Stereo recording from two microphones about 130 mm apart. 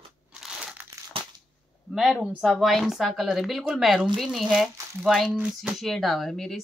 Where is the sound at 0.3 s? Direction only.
5° right (ahead or behind).